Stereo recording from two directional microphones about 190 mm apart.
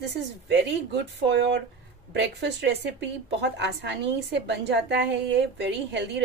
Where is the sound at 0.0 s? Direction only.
65° right (ahead or behind).